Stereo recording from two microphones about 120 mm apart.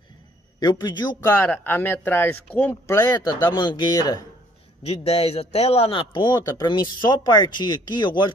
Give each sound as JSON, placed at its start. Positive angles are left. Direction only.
{"t": 0.6, "sound": "a man's voice", "side_deg": 35}
{"t": 1.4, "sound": "speech", "side_deg": 15}
{"t": 3.0, "sound": "a man's voice", "side_deg": 35}
{"t": 4.8, "sound": "a man's voice", "side_deg": 60}